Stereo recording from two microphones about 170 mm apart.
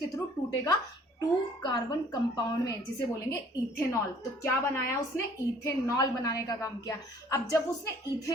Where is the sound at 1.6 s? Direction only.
20° left (ahead or behind).